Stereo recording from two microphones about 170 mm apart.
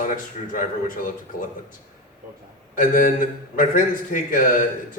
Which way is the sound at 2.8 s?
55° left (ahead or behind).